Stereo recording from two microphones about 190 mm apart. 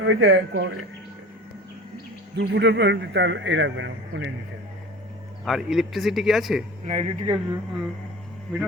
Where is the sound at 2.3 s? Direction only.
65° right (ahead or behind).